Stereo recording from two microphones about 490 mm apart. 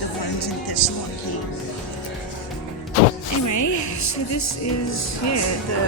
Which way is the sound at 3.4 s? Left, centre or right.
Left.